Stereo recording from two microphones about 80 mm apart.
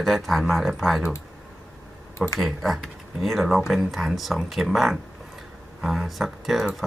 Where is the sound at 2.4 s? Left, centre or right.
Centre.